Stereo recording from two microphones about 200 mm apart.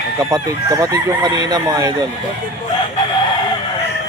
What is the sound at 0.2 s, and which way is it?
Speech, 15° right (ahead or behind).